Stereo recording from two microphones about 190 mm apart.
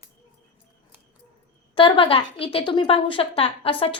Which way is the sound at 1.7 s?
25° left (ahead or behind).